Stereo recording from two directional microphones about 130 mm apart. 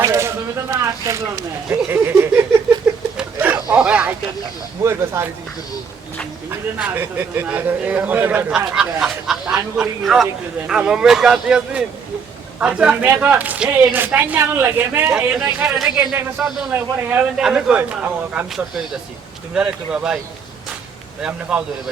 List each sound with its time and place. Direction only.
0.0 s speech: 20° right (ahead or behind)
2.8 s a sound: 10° right (ahead or behind)
4.8 s speech: 20° right (ahead or behind)
6.7 s speech: 15° right (ahead or behind)
9.6 s speech: 15° right (ahead or behind)
10.0 s speech: centre (ahead or behind); by 15.1 s 15° right (ahead or behind)
15.4 s speech: 5° right (ahead or behind)
19.5 s speech: 5° right (ahead or behind)
21.2 s speech: 5° right (ahead or behind)